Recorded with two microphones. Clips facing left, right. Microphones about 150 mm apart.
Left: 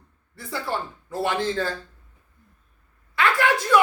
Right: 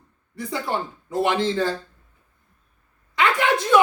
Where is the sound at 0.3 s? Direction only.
20° right (ahead or behind).